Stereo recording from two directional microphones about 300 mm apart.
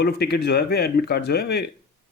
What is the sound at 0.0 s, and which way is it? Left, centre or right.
Speech, left.